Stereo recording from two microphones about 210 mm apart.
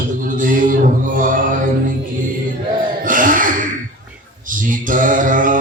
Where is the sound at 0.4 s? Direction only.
40° right (ahead or behind).